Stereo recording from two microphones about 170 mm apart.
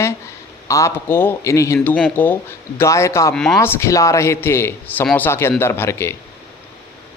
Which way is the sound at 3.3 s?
5° left (ahead or behind).